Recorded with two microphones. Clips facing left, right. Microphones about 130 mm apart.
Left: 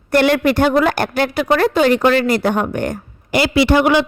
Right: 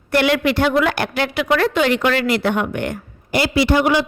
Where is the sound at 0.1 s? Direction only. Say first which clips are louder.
Left 3 dB; 45° left (ahead or behind).